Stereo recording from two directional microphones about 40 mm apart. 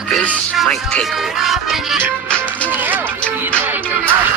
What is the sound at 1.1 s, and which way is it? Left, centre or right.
Music, centre.